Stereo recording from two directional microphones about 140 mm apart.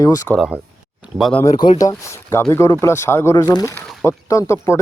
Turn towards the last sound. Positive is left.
turn(degrees=20)  # may be behind; listen again after turning